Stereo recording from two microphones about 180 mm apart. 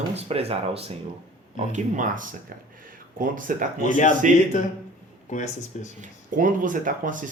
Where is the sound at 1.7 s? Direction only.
45° right (ahead or behind).